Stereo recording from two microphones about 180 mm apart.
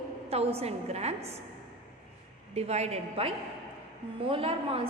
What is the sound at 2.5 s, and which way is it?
A woman's voice, 35° right (ahead or behind).